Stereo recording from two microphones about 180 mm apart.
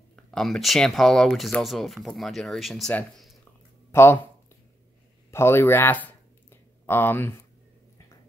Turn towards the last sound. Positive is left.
turn(degrees=10)  # may be behind; listen again after turning